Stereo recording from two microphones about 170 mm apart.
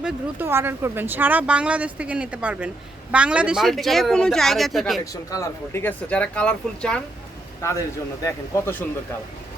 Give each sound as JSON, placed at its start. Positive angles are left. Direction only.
{"t": 0.0, "sound": "speech", "side_deg": -10}
{"t": 5.1, "sound": "speech", "side_deg": 20}
{"t": 8.2, "sound": "speech", "side_deg": 20}